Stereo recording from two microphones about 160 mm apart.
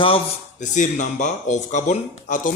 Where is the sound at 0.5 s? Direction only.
50° left (ahead or behind).